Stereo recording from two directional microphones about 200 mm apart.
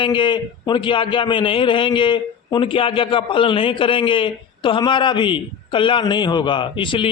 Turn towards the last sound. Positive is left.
turn(degrees=25)  # may be behind; listen again after turning